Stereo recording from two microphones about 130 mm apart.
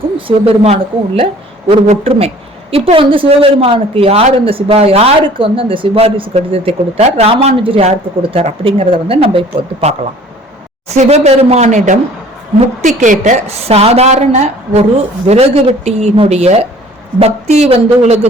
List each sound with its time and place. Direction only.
0.3 s a woman's voice: 45° right (ahead or behind)
10.9 s a woman's voice: 55° right (ahead or behind)